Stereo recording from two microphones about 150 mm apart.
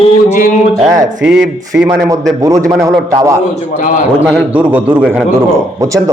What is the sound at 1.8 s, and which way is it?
A man's voice, 20° right (ahead or behind).